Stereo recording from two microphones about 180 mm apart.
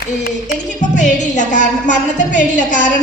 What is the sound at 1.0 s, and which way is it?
A woman's voice, 40° left (ahead or behind).